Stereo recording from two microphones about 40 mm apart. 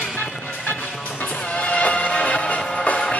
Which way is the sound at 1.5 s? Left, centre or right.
Left.